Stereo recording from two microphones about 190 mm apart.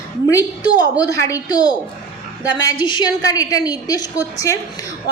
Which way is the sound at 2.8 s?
25° left (ahead or behind).